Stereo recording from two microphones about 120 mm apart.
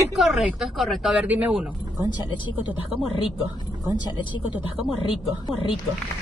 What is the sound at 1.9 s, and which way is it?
Speech, 40° left (ahead or behind).